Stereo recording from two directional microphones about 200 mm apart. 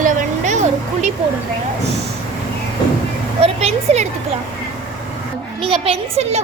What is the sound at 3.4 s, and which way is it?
Speech, 30° right (ahead or behind).